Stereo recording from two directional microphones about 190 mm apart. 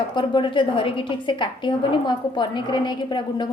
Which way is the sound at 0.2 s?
25° left (ahead or behind).